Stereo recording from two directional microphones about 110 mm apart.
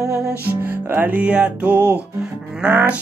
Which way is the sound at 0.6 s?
15° right (ahead or behind).